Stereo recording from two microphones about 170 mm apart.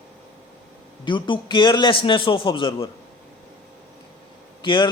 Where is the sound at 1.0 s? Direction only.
30° left (ahead or behind).